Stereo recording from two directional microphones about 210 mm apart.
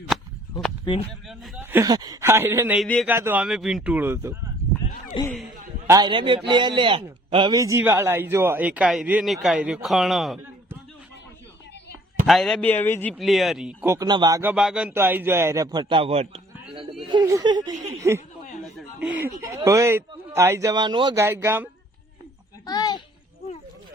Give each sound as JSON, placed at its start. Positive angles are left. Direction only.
{"t": 0.9, "sound": "speech", "side_deg": 20}
{"t": 1.3, "sound": "a man's voice", "side_deg": -10}
{"t": 2.8, "sound": "speech", "side_deg": 5}
{"t": 3.1, "sound": "speech", "side_deg": -10}
{"t": 5.1, "sound": "speech", "side_deg": 25}
{"t": 5.9, "sound": "speech", "side_deg": -20}
{"t": 12.2, "sound": "speech", "side_deg": 0}
{"t": 13.8, "sound": "speech", "side_deg": -15}
{"t": 14.5, "sound": "speech", "side_deg": -5}
{"t": 17.1, "sound": "speech", "side_deg": -15}
{"t": 18.6, "sound": "a sound", "side_deg": -5}
{"t": 19.4, "sound": "speech", "side_deg": -15}
{"t": 22.6, "sound": "a sound", "side_deg": 20}